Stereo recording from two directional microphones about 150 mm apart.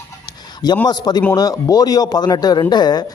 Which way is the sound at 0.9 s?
25° left (ahead or behind).